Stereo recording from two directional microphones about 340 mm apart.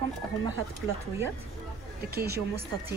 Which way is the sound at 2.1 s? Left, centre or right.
Right.